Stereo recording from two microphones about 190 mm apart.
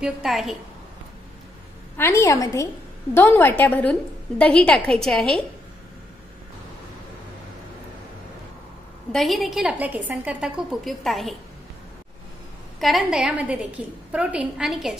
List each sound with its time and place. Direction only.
0.0 s a woman's voice: centre (ahead or behind)
2.0 s a woman's voice: 15° left (ahead or behind)
9.1 s a woman's voice: centre (ahead or behind)
12.8 s a woman's voice: centre (ahead or behind)